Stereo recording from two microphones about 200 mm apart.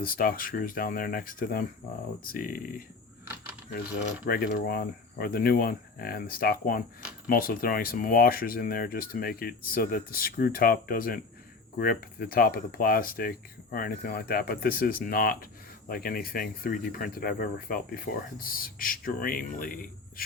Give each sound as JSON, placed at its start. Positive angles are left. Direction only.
{"t": 0.0, "sound": "speech", "side_deg": 45}
{"t": 4.3, "sound": "speech", "side_deg": 50}